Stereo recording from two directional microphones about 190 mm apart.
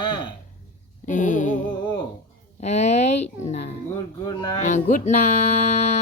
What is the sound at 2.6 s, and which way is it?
Speech, 35° left (ahead or behind).